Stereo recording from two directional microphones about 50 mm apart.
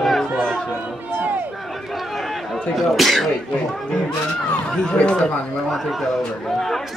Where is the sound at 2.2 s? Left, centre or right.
Centre.